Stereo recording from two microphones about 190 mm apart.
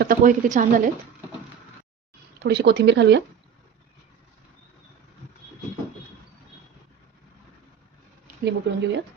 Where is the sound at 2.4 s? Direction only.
60° right (ahead or behind).